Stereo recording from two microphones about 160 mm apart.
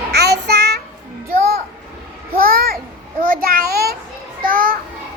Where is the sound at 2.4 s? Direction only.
70° right (ahead or behind).